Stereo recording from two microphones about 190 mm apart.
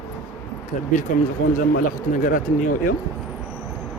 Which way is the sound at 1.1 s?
45° left (ahead or behind).